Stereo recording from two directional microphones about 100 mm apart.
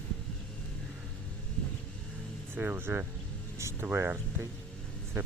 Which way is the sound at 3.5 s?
30° right (ahead or behind).